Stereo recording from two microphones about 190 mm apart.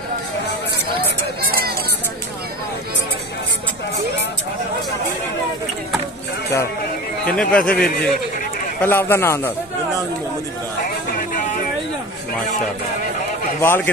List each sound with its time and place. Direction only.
0.9 s a sound: 55° right (ahead or behind)
7.2 s a man's voice: 5° left (ahead or behind)
13.6 s a man's voice: 10° left (ahead or behind)